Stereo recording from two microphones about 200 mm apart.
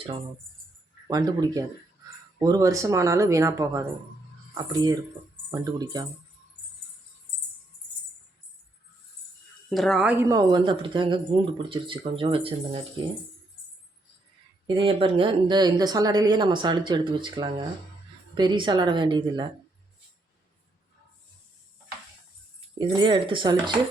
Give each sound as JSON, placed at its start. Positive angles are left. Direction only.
{"t": 1.0, "sound": "speech", "side_deg": -20}
{"t": 9.6, "sound": "speech", "side_deg": 0}
{"t": 14.8, "sound": "speech", "side_deg": -30}
{"t": 22.8, "sound": "speech", "side_deg": -25}